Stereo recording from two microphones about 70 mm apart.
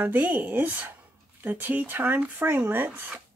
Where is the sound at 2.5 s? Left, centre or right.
Right.